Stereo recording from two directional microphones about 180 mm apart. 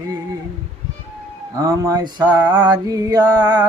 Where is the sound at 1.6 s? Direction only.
20° right (ahead or behind).